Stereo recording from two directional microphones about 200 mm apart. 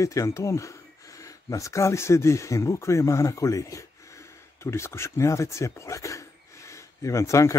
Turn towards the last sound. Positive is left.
turn(degrees=15)  # may be behind; listen again after turning